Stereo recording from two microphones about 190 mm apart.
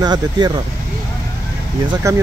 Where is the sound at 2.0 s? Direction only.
15° right (ahead or behind).